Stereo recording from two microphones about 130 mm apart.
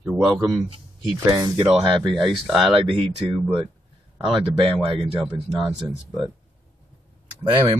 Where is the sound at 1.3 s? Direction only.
25° right (ahead or behind).